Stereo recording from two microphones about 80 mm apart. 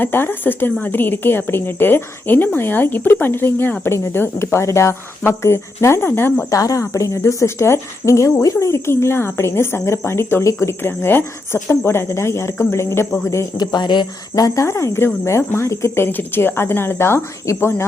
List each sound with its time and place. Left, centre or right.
0.0 s a woman's voice: left
6.5 s speech: left
13.6 s speech: left
14.3 s speech: left